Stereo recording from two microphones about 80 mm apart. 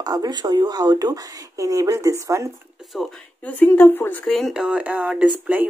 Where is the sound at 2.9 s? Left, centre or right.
Centre.